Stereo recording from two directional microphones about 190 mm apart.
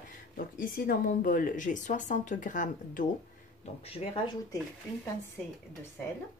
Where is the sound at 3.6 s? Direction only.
30° left (ahead or behind).